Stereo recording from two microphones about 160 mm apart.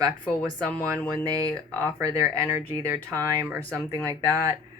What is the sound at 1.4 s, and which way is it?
Speech, 20° right (ahead or behind).